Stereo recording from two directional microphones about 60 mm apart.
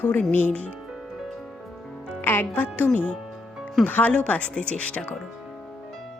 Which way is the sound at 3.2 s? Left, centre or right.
Centre.